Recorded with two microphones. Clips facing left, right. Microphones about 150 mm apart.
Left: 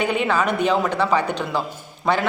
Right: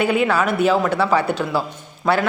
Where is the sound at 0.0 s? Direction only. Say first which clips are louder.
Right 3 dB; 5° right (ahead or behind).